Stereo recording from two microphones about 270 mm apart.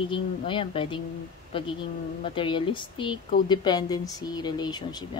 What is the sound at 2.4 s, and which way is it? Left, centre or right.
Speech, centre.